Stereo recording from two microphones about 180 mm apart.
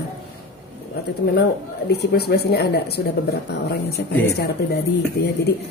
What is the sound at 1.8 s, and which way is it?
Speech, 65° left (ahead or behind).